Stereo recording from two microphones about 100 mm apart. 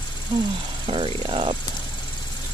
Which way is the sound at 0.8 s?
65° right (ahead or behind).